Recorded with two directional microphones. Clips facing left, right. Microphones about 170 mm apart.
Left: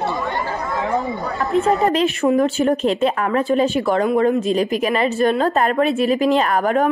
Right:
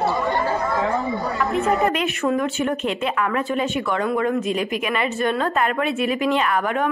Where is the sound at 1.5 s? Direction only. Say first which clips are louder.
Left 4 dB; 35° left (ahead or behind).